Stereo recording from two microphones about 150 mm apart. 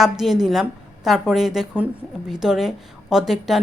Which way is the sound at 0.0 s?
Centre (ahead or behind).